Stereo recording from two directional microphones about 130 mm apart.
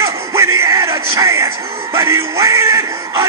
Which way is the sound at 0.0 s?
20° right (ahead or behind).